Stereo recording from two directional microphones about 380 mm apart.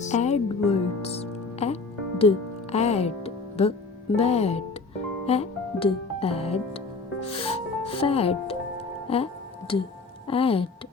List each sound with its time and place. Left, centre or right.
0.0 s music: centre
2.7 s speech: centre
5.2 s music: centre
10.2 s speech: centre